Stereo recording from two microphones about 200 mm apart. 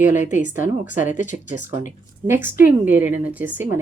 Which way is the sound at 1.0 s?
40° left (ahead or behind).